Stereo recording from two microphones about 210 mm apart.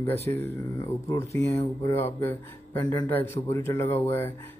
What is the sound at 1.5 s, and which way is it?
A man's voice, 10° left (ahead or behind).